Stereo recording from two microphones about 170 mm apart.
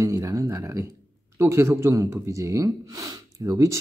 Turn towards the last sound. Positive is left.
turn(degrees=-20)  # may be behind; listen again after turning